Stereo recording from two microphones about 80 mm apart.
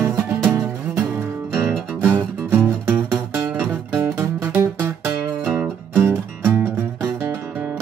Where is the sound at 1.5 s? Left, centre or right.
Right.